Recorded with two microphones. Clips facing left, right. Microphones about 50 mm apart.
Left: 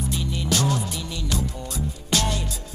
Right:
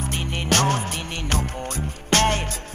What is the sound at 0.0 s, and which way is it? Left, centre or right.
Music, right.